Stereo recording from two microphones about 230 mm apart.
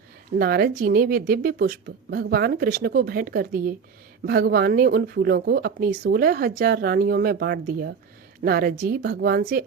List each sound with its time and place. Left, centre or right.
0.3 s speech: right